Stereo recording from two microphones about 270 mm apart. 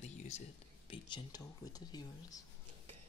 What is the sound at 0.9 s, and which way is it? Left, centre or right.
Speech, centre.